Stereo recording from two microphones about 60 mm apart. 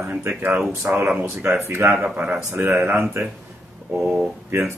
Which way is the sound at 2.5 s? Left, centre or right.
Right.